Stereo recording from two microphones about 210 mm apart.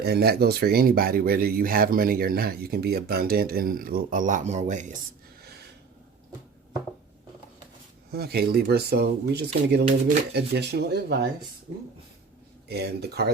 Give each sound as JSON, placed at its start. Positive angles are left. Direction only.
{"t": 0.0, "sound": "speech", "side_deg": -50}
{"t": 8.1, "sound": "speech", "side_deg": -50}
{"t": 12.6, "sound": "speech", "side_deg": -50}